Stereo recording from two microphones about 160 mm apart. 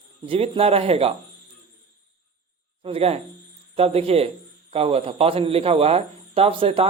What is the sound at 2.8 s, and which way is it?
Speech, 40° right (ahead or behind).